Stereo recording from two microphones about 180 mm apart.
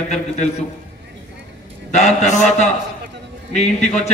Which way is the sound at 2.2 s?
40° left (ahead or behind).